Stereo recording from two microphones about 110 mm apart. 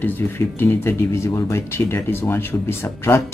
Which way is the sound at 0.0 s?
20° left (ahead or behind).